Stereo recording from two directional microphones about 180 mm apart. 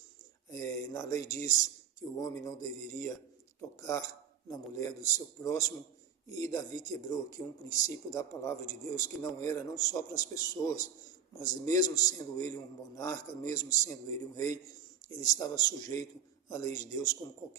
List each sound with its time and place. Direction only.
0.5 s a man's voice: 20° left (ahead or behind)